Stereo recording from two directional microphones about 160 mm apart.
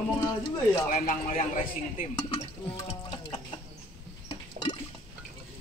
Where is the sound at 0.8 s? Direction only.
50° left (ahead or behind).